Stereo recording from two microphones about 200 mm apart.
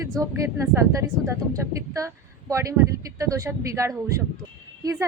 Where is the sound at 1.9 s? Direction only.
15° right (ahead or behind).